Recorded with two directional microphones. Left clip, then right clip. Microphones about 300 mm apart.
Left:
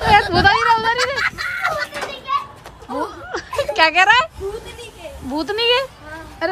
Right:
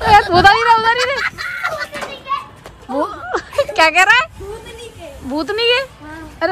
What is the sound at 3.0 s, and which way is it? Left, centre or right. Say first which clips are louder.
Snicker: right 7 dB; centre.